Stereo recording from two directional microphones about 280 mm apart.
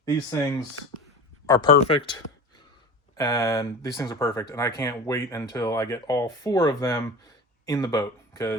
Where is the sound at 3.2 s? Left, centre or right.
Centre.